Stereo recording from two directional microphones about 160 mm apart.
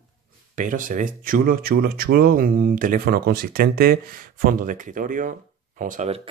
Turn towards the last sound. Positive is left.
turn(degrees=-55)  # may be behind; listen again after turning